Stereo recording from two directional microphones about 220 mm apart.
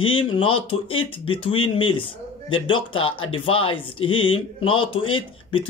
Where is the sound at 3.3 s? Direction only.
25° left (ahead or behind).